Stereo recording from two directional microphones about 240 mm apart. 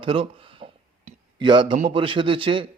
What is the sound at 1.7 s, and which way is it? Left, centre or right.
Speech, right.